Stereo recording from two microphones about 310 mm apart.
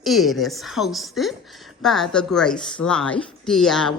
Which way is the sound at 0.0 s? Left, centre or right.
Centre.